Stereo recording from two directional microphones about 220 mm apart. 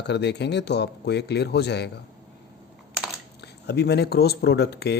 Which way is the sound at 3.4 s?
50° left (ahead or behind).